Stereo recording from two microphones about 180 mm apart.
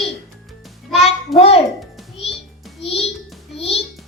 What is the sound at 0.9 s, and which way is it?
Music, centre (ahead or behind).